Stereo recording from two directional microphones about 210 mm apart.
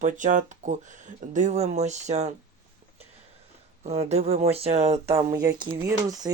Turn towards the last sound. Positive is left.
turn(degrees=-15)  # may be behind; listen again after turning